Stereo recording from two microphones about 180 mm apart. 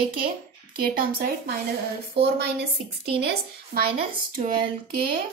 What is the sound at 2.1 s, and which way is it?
Speech, 65° right (ahead or behind).